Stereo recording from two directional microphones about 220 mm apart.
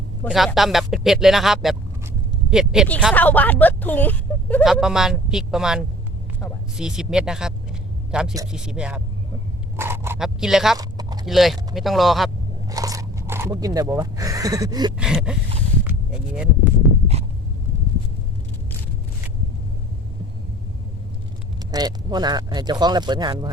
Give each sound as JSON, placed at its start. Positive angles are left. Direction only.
{"t": 0.3, "sound": "speech", "side_deg": 0}
{"t": 10.8, "sound": "a sound", "side_deg": -15}
{"t": 11.3, "sound": "speech", "side_deg": 0}
{"t": 12.6, "sound": "speech", "side_deg": -15}
{"t": 14.9, "sound": "speech", "side_deg": -5}
{"t": 15.8, "sound": "a sound", "side_deg": -5}
{"t": 21.7, "sound": "speech", "side_deg": -20}